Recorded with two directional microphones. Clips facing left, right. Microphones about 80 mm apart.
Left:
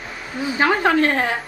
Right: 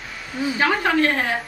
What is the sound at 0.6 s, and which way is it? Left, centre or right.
Speech, left.